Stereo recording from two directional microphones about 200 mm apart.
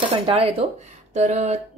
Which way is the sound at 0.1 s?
25° right (ahead or behind).